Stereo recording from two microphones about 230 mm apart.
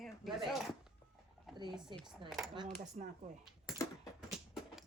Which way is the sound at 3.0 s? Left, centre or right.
Right.